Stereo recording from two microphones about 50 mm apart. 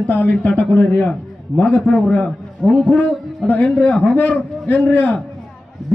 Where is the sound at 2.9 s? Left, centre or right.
Left.